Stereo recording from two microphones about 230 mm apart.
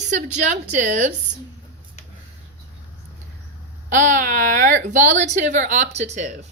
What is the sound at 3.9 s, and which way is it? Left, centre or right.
A woman's voice, right.